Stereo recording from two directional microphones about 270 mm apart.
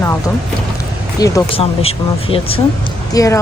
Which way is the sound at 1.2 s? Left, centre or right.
Centre.